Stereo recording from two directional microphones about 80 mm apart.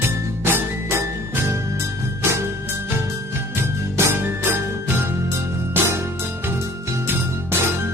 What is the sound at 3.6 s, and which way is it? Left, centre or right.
Music, right.